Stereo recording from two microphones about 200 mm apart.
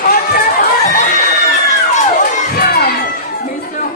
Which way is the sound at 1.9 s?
40° left (ahead or behind).